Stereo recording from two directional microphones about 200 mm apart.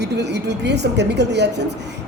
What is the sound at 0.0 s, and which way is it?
Speech, 55° right (ahead or behind).